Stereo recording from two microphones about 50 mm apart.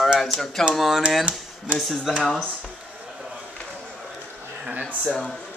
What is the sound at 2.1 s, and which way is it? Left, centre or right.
Speech, centre.